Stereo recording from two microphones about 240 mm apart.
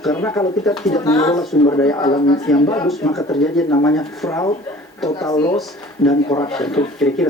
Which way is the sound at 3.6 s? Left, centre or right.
Centre.